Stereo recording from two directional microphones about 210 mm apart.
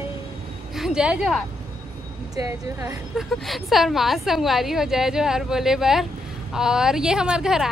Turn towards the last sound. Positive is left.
turn(degrees=-5)  # may be behind; listen again after turning